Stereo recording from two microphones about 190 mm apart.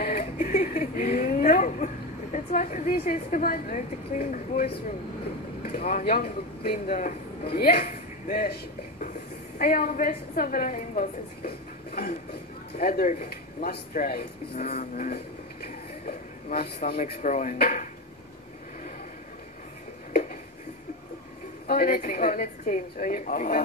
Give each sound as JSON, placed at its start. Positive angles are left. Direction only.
{"t": 0.0, "sound": "a sound", "side_deg": 50}
{"t": 2.3, "sound": "a woman's voice", "side_deg": 40}
{"t": 5.8, "sound": "a woman's voice", "side_deg": 45}
{"t": 7.8, "sound": "speech", "side_deg": 40}
{"t": 9.6, "sound": "a woman's voice", "side_deg": 50}
{"t": 14.5, "sound": "speech", "side_deg": 35}
{"t": 16.1, "sound": "a sound", "side_deg": 40}
{"t": 16.9, "sound": "speech", "side_deg": 40}
{"t": 21.6, "sound": "a woman's voice", "side_deg": 50}